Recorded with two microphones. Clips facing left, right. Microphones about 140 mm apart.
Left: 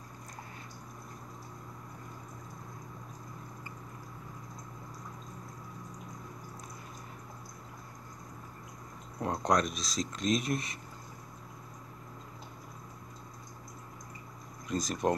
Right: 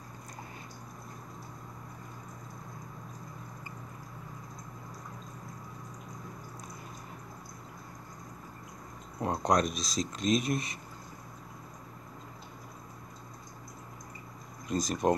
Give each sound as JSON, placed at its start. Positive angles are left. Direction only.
{"t": 9.2, "sound": "speech", "side_deg": -20}
{"t": 14.7, "sound": "speech", "side_deg": -20}